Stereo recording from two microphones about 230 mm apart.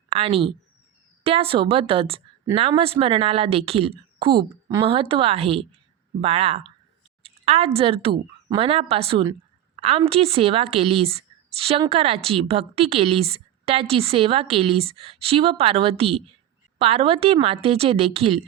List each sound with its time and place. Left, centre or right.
0.1 s speech: right